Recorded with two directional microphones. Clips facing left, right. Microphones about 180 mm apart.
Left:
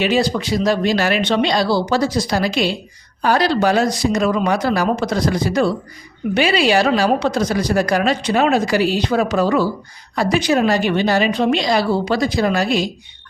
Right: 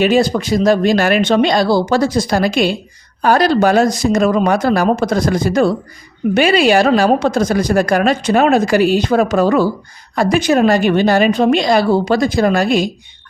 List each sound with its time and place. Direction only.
0.0 s a woman's voice: 45° right (ahead or behind)